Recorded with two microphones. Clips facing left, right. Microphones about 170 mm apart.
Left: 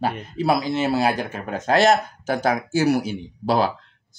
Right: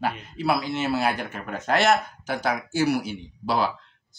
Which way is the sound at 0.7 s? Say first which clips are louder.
Left 4 dB; 35° left (ahead or behind).